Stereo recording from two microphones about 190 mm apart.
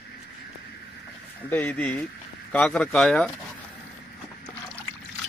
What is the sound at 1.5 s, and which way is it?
A man's voice, 10° left (ahead or behind).